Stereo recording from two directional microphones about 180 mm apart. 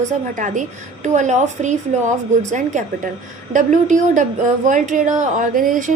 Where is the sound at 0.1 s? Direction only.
45° right (ahead or behind).